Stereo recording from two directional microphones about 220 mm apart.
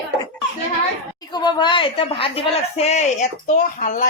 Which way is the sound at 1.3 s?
20° left (ahead or behind).